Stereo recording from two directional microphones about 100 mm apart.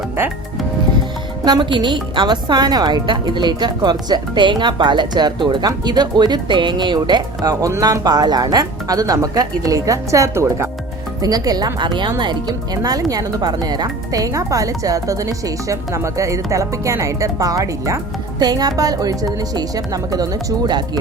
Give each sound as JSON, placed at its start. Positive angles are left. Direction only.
{"t": 0.2, "sound": "speech", "side_deg": -25}
{"t": 1.5, "sound": "a woman's voice", "side_deg": -45}
{"t": 7.7, "sound": "speech", "side_deg": -35}
{"t": 11.2, "sound": "speech", "side_deg": -40}